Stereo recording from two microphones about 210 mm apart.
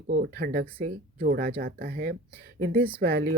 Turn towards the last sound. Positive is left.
turn(degrees=-45)  # may be behind; listen again after turning